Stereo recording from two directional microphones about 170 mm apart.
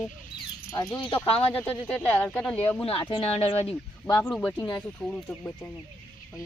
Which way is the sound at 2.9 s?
30° left (ahead or behind).